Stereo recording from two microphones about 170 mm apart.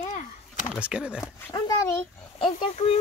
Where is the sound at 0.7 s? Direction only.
5° right (ahead or behind).